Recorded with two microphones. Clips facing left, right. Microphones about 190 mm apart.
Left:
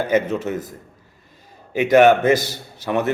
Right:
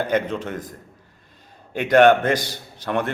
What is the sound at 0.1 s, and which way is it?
Speech, 5° left (ahead or behind).